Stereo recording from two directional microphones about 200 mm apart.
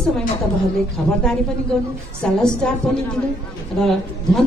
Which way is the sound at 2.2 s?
5° left (ahead or behind).